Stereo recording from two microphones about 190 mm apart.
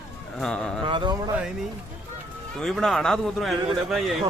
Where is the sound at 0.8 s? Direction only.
25° right (ahead or behind).